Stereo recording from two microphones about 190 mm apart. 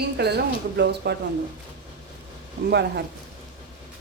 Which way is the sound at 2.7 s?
60° right (ahead or behind).